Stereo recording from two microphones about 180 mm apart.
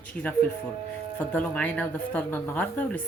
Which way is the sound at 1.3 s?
10° left (ahead or behind).